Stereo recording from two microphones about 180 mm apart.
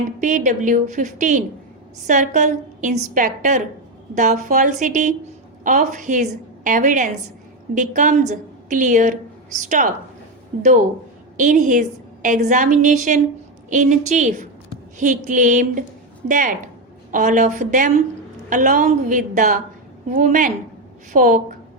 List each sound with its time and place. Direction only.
0.2 s a woman's voice: 45° right (ahead or behind)